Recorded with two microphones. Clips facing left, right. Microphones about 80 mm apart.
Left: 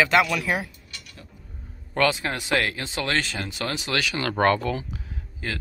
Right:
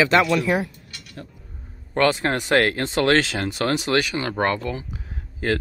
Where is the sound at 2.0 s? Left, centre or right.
Right.